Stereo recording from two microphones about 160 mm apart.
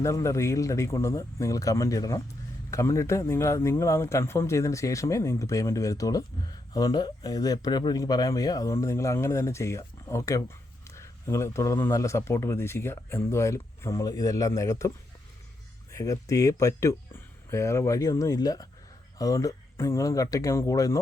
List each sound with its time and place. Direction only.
0.0 s speech: 20° left (ahead or behind)